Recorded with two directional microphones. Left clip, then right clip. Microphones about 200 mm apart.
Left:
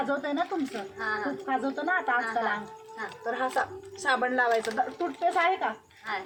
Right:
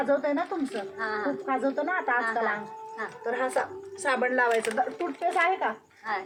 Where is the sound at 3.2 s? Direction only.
20° right (ahead or behind).